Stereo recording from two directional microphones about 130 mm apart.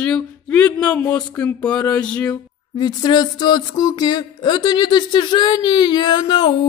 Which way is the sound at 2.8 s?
35° left (ahead or behind).